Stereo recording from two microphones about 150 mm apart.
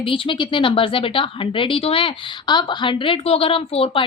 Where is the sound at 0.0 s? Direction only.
35° left (ahead or behind).